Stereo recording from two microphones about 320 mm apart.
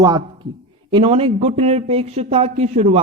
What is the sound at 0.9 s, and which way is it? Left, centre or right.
A man's voice, centre.